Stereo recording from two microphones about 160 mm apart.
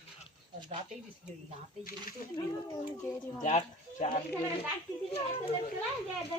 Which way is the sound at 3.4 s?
45° left (ahead or behind).